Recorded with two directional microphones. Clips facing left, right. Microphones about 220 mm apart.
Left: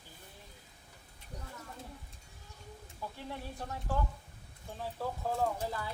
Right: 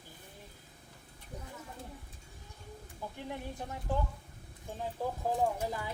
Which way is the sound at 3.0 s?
15° right (ahead or behind).